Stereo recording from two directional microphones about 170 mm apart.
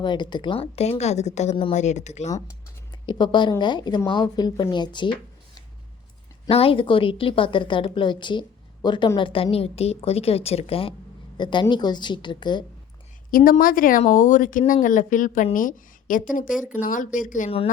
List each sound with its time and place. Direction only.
0.0 s a woman's voice: 25° left (ahead or behind); by 2.3 s 40° left (ahead or behind)
3.1 s speech: 25° left (ahead or behind)
6.5 s a woman's voice: 35° left (ahead or behind)
13.3 s a woman's voice: 55° left (ahead or behind)